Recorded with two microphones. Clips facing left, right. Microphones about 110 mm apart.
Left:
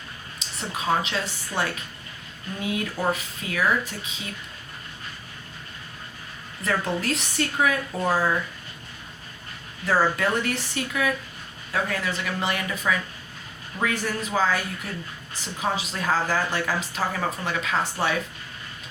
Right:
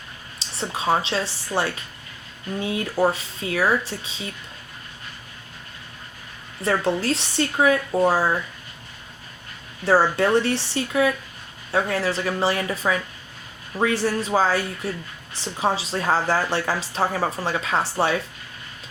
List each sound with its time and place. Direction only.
0.3 s a woman's voice: 30° right (ahead or behind)
6.6 s a woman's voice: 30° right (ahead or behind)
9.8 s a woman's voice: 30° right (ahead or behind)